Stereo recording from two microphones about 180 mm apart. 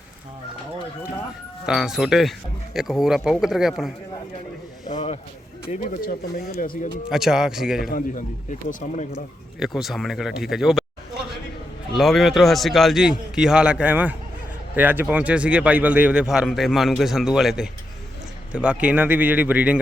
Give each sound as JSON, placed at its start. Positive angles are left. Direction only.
{"t": 1.6, "sound": "a man's voice", "side_deg": -5}
{"t": 4.9, "sound": "a man's voice", "side_deg": 30}
{"t": 5.7, "sound": "a man's voice", "side_deg": 45}
{"t": 7.1, "sound": "a man's voice", "side_deg": -5}
{"t": 7.9, "sound": "a man's voice", "side_deg": 50}
{"t": 9.6, "sound": "a man's voice", "side_deg": 0}
{"t": 11.9, "sound": "a man's voice", "side_deg": 0}